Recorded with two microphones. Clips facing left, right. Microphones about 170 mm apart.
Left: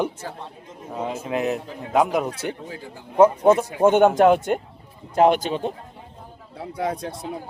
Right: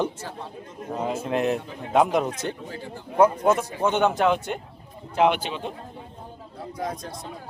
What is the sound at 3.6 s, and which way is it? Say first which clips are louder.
Speech: left 7 dB; 50° left (ahead or behind).